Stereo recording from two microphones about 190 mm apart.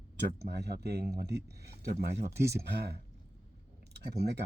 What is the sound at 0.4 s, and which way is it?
Speech, 60° right (ahead or behind).